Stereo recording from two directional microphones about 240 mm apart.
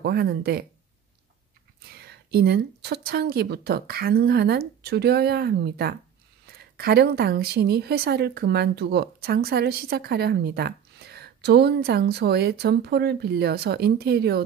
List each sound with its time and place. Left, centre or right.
0.0 s a woman's voice: right
1.9 s a woman's voice: right